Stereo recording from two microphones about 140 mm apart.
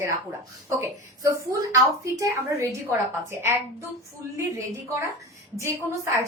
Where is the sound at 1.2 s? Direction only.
25° right (ahead or behind).